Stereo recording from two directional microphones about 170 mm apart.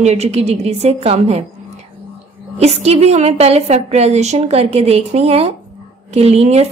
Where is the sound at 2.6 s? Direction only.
40° right (ahead or behind).